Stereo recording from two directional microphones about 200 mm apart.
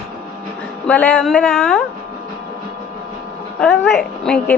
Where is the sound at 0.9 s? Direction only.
10° left (ahead or behind).